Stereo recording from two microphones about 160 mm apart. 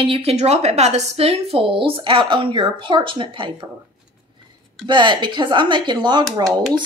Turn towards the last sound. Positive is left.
turn(degrees=-25)  # may be behind; listen again after turning